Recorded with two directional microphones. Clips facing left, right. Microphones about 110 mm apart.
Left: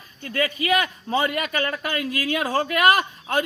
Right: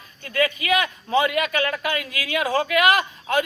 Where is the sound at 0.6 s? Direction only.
35° left (ahead or behind).